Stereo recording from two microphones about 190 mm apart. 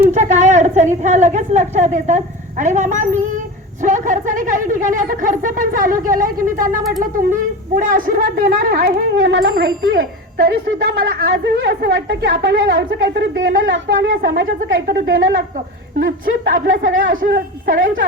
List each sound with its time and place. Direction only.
0.1 s a sound: 40° right (ahead or behind)
0.5 s a woman's voice: 40° right (ahead or behind); by 14.4 s 70° right (ahead or behind)
14.8 s a woman's voice: 50° right (ahead or behind)